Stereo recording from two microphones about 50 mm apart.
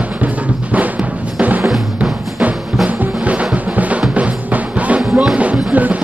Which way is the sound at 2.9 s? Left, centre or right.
Right.